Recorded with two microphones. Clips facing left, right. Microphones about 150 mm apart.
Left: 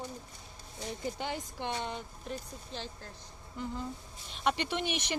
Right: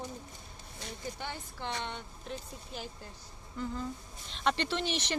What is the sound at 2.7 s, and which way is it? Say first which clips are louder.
Speech: even; 10° right (ahead or behind).